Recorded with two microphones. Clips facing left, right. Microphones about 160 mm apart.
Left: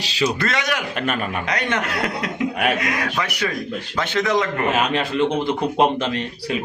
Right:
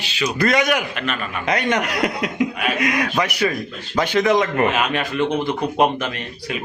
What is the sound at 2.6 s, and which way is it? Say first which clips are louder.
Speech: even; 60° left (ahead or behind).